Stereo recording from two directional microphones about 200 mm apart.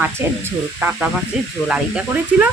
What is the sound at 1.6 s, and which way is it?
Speech, 5° right (ahead or behind).